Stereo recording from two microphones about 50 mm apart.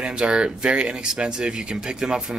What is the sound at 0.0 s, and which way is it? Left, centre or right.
Speech, centre.